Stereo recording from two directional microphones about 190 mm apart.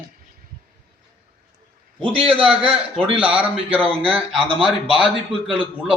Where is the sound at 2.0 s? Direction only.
30° right (ahead or behind).